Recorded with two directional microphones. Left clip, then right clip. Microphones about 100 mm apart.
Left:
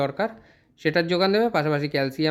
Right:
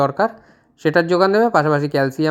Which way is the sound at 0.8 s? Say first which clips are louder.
Right 7 dB; 25° right (ahead or behind).